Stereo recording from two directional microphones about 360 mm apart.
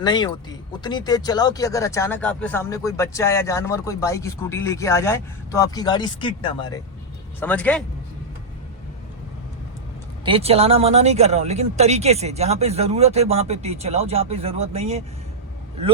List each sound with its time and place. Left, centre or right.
0.0 s a man's voice: centre
10.2 s speech: centre